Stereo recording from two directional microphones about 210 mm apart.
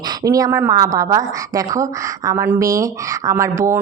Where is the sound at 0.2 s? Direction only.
15° right (ahead or behind).